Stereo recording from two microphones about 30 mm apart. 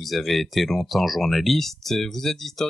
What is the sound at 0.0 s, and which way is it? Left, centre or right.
Speech, centre.